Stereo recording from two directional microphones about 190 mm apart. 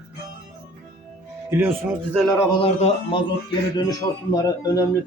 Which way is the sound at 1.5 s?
10° right (ahead or behind).